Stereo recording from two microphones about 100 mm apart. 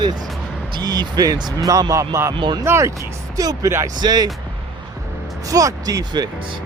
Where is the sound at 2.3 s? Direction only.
50° right (ahead or behind).